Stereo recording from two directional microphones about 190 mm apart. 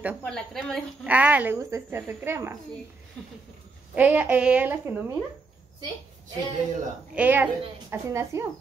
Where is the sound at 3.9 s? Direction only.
10° right (ahead or behind).